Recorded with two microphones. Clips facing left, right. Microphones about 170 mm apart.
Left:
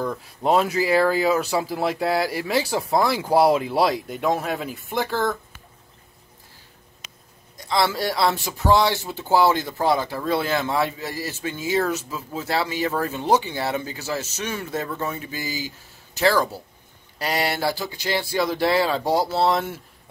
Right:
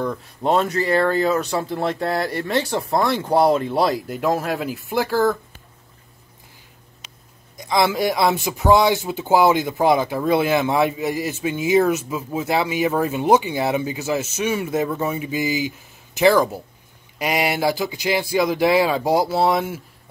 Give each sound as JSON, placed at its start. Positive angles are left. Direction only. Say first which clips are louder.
{"t": 0.0, "sound": "speech", "louder": "right 1 dB", "side_deg": 0}
{"t": 7.5, "sound": "speech", "louder": "right 3 dB", "side_deg": -15}